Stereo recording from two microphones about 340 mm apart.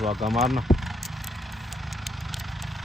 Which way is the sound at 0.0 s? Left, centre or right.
Centre.